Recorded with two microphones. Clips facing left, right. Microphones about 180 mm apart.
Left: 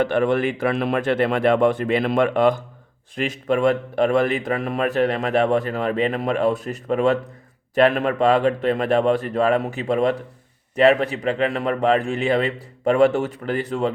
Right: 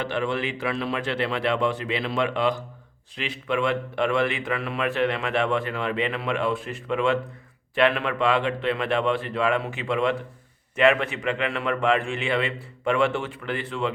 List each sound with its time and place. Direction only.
0.0 s a man's voice: 50° left (ahead or behind)